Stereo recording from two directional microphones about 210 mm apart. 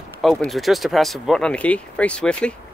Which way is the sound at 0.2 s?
Centre (ahead or behind).